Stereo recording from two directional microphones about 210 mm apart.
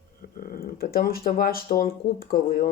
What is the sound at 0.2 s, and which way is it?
Speech, 45° left (ahead or behind).